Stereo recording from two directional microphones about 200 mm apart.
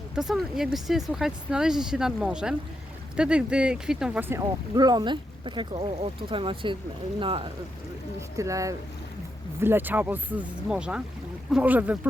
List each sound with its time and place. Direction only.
0.2 s speech: centre (ahead or behind); by 7.5 s 25° right (ahead or behind)
8.4 s speech: 15° right (ahead or behind)